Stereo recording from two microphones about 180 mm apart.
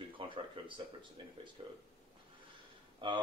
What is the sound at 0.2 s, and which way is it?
Speech, 25° right (ahead or behind).